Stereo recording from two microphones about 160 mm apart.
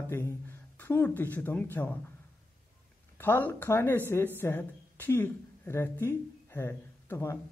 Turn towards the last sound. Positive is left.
turn(degrees=15)  # may be behind; listen again after turning